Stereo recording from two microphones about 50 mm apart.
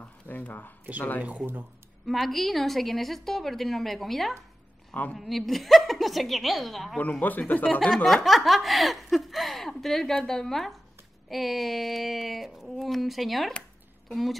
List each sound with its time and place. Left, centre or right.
0.0 s speech: left
1.4 s speech: right
2.0 s speech: centre
7.0 s speech: left
7.9 s speech: centre
13.5 s chopping: left